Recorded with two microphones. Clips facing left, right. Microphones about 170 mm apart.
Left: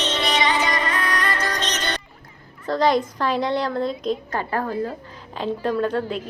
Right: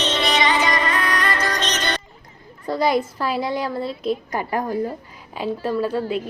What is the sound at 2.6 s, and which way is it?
A woman's voice, 10° right (ahead or behind).